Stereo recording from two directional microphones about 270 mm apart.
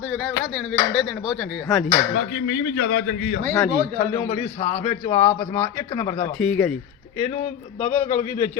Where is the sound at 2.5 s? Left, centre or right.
Left.